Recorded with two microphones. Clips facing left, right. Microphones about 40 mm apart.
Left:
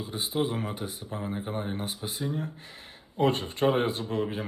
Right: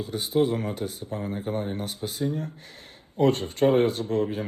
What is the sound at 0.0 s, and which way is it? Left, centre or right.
Speech, left.